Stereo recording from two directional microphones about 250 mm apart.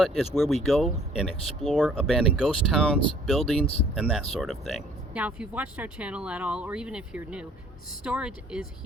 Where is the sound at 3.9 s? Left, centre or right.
Centre.